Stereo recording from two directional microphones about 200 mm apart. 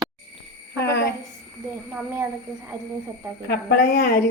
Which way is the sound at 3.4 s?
50° left (ahead or behind).